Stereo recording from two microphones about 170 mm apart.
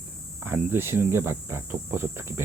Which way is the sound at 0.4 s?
10° right (ahead or behind).